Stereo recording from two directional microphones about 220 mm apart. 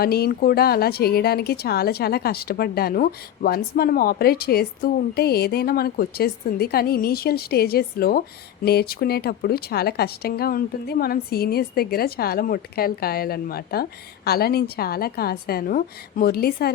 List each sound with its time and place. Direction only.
0.0 s speech: 45° left (ahead or behind)